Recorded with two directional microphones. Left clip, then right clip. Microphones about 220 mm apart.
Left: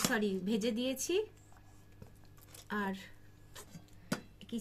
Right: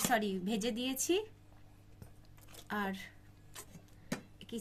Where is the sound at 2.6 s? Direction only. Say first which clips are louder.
Even; 50° right (ahead or behind).